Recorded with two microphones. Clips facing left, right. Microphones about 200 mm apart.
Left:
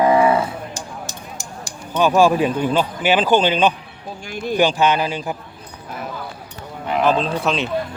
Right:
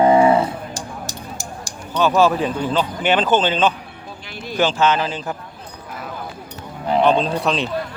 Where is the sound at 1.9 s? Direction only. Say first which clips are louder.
Left 1 dB; 15° left (ahead or behind).